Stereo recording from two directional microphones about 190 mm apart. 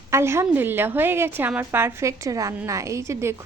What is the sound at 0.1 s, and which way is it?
A woman's voice, 15° right (ahead or behind).